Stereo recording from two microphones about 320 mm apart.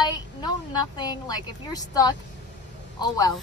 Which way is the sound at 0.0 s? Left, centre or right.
Centre.